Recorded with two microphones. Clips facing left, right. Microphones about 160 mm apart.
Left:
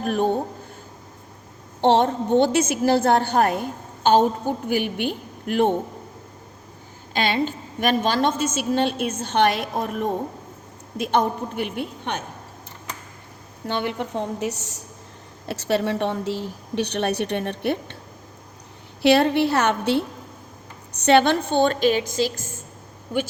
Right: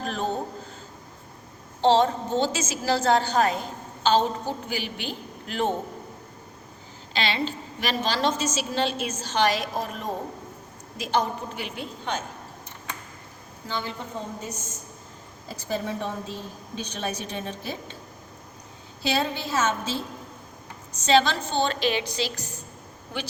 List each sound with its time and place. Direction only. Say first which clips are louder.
0.0 s a woman's voice: left 7 dB; 55° left (ahead or behind)
1.8 s a woman's voice: left 2 dB; 60° left (ahead or behind)
7.1 s a woman's voice: left 5 dB; 50° left (ahead or behind)
13.7 s a woman's voice: left 7 dB; 65° left (ahead or behind)
19.0 s a woman's voice: left 10 dB; 65° left (ahead or behind); by 22.5 s 45° left (ahead or behind)